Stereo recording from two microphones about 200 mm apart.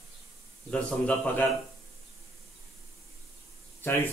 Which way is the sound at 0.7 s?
5° left (ahead or behind).